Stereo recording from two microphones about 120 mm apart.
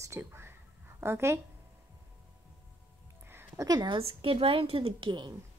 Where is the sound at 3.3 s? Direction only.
20° right (ahead or behind).